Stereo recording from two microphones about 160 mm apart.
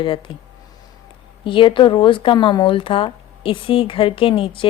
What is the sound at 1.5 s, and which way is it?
Speech, 30° left (ahead or behind).